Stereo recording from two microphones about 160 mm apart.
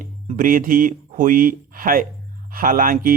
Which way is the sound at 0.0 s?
55° right (ahead or behind).